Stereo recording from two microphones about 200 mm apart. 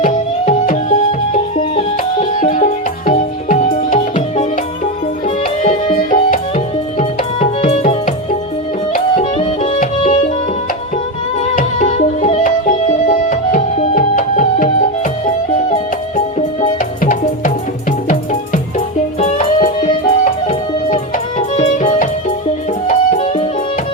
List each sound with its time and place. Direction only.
0.0 s music: 40° left (ahead or behind)
2.3 s music: 40° left (ahead or behind)
5.6 s music: 40° left (ahead or behind)
11.4 s music: 40° left (ahead or behind)
19.2 s music: 30° left (ahead or behind)